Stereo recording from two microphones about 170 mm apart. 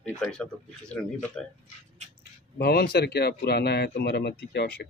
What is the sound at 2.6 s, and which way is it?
Speech, 70° left (ahead or behind).